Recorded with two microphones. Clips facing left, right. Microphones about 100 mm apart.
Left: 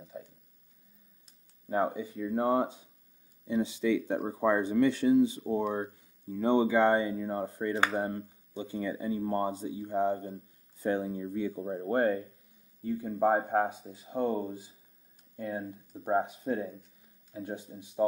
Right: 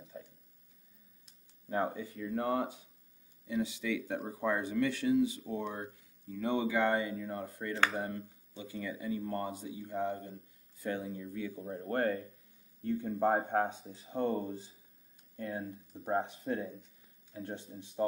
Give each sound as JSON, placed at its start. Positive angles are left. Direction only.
{"t": 0.0, "sound": "tick-tock", "side_deg": 5}
{"t": 1.7, "sound": "speech", "side_deg": 15}
{"t": 8.2, "sound": "speech", "side_deg": 25}
{"t": 12.8, "sound": "speech", "side_deg": 5}